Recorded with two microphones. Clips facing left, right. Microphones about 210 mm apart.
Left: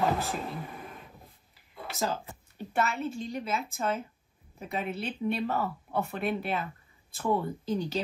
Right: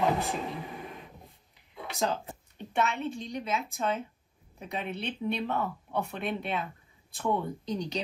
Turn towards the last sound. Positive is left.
turn(degrees=5)  # may be behind; listen again after turning